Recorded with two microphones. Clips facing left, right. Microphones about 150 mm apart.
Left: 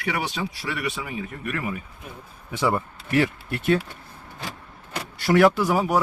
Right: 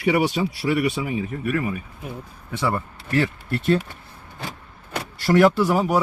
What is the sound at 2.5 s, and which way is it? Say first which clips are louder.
Speech: left 1 dB; 15° left (ahead or behind).